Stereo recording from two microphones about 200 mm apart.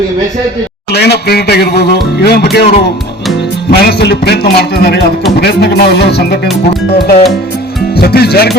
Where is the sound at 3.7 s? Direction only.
55° left (ahead or behind).